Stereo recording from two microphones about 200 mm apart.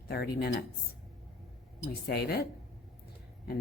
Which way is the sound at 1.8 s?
55° left (ahead or behind).